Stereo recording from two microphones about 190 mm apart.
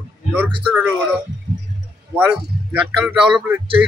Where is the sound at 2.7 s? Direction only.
10° right (ahead or behind).